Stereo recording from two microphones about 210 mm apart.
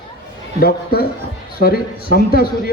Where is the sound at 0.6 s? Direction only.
45° left (ahead or behind).